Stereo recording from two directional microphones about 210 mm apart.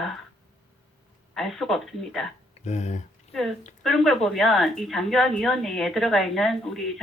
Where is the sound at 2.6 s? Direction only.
30° left (ahead or behind).